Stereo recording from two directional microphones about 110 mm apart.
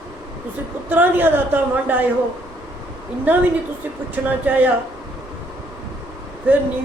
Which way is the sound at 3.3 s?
15° right (ahead or behind).